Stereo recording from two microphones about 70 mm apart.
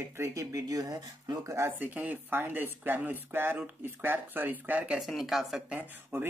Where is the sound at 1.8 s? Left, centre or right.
Right.